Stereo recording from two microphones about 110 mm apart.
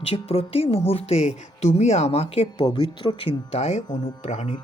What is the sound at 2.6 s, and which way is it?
Speech, 45° left (ahead or behind).